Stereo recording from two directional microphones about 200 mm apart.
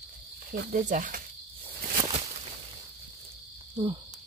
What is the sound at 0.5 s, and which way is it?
Speech, 40° right (ahead or behind).